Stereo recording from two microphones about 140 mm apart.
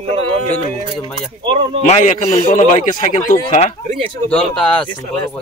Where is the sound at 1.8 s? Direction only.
60° left (ahead or behind).